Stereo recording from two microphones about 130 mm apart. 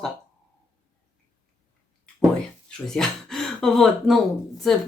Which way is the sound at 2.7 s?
5° left (ahead or behind).